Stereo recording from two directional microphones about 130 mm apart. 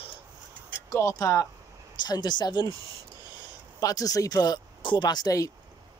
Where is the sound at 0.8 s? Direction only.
20° left (ahead or behind).